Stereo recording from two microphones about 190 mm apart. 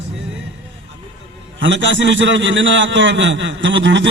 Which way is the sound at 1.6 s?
75° right (ahead or behind).